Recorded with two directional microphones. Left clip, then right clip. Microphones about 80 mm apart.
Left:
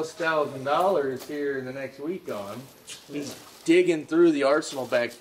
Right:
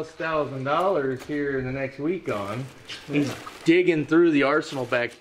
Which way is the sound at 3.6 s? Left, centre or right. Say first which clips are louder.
Right 1 dB; left.